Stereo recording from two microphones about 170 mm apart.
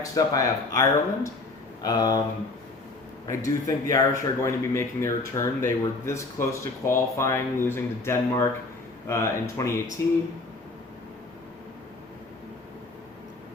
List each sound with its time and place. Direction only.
0.0 s speech: 20° left (ahead or behind)
3.2 s speech: 20° left (ahead or behind)